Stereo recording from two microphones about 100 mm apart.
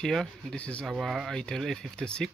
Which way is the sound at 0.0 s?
5° left (ahead or behind).